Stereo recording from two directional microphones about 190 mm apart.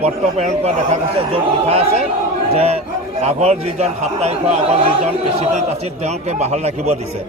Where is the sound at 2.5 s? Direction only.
35° right (ahead or behind).